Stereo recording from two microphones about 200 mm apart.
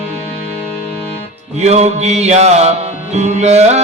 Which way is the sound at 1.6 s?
35° right (ahead or behind).